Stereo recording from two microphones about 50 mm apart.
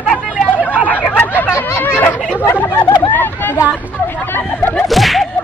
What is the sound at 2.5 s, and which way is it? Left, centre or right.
Hubbub, left.